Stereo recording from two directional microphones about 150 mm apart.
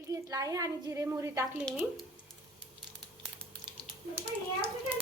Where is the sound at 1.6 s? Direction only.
5° left (ahead or behind).